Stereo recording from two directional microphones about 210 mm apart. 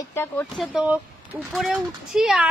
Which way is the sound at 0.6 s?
5° right (ahead or behind).